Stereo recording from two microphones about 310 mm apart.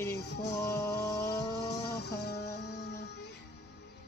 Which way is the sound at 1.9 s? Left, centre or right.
Left.